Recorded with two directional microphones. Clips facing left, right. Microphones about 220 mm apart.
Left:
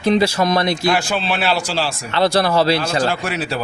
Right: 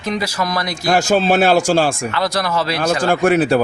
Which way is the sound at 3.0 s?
50° right (ahead or behind).